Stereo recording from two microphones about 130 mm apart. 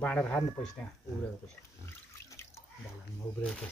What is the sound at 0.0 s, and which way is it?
Speech, 10° left (ahead or behind).